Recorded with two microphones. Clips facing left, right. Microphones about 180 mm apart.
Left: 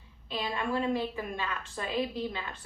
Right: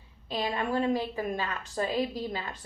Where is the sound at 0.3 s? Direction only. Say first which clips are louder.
Right 2 dB; 40° right (ahead or behind).